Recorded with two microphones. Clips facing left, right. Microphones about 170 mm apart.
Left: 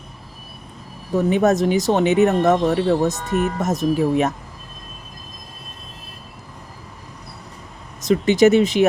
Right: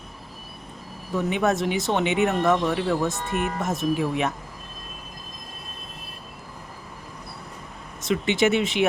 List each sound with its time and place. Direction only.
1.1 s speech: 40° left (ahead or behind)
8.0 s speech: 40° left (ahead or behind)